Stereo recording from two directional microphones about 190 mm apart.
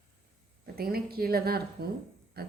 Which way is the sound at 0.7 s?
50° right (ahead or behind).